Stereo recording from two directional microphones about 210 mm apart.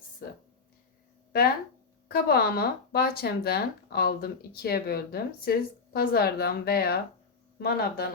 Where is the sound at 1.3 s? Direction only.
45° left (ahead or behind).